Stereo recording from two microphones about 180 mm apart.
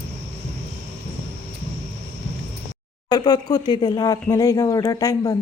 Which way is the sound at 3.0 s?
20° left (ahead or behind).